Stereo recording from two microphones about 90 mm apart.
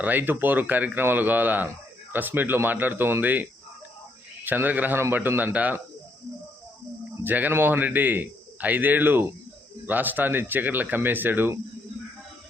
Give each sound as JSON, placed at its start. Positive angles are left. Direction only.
{"t": 0.0, "sound": "a man's voice", "side_deg": -20}
{"t": 4.4, "sound": "a man's voice", "side_deg": -20}
{"t": 7.3, "sound": "a man's voice", "side_deg": -20}